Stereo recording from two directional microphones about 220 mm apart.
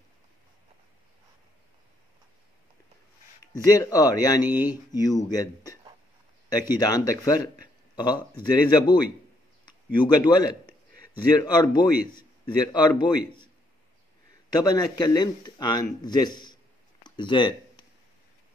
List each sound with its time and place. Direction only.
3.5 s speech: 15° left (ahead or behind)
14.6 s speech: 15° left (ahead or behind)
17.0 s a sound: 20° left (ahead or behind)